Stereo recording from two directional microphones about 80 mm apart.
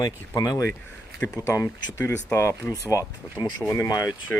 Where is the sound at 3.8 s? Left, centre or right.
Left.